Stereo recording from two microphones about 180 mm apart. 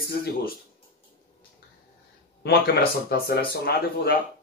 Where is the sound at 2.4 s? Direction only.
60° left (ahead or behind).